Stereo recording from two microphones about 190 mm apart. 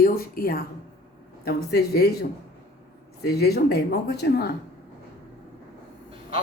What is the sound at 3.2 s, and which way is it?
Speech, 60° left (ahead or behind).